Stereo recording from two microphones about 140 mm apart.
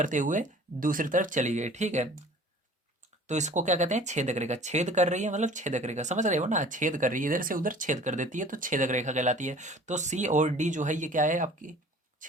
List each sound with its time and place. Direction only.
0.0 s speech: 65° right (ahead or behind)
3.2 s speech: 55° right (ahead or behind)